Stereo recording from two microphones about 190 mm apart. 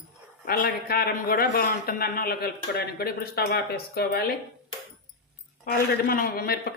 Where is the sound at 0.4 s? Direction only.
50° left (ahead or behind).